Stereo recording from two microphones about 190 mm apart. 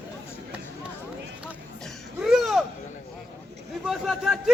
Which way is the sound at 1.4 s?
Centre (ahead or behind).